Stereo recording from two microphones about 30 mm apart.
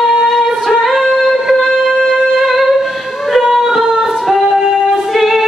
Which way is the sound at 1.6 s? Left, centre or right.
Centre.